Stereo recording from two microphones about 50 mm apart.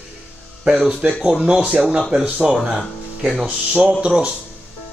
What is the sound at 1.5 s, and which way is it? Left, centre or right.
Speech, right.